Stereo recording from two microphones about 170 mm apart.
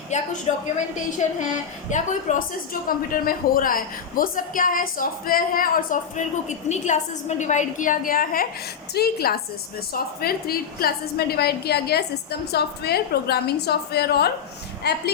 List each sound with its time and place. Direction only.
0.1 s a woman's voice: 45° left (ahead or behind)
9.0 s a woman's voice: 65° left (ahead or behind)